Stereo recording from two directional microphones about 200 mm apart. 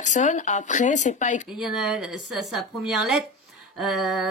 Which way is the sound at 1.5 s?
Centre (ahead or behind).